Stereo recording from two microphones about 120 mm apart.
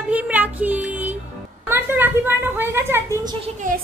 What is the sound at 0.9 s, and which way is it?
Music, 15° right (ahead or behind).